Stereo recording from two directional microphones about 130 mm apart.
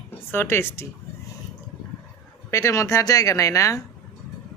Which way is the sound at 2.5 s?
25° left (ahead or behind).